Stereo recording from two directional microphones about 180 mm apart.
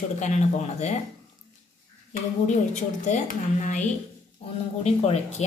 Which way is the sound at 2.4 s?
40° left (ahead or behind).